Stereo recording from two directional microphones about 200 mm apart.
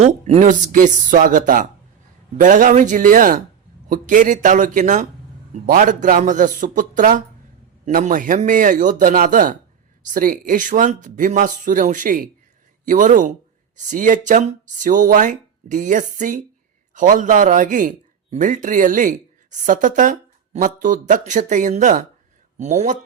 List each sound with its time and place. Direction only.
0.0 s a man's voice: 35° right (ahead or behind)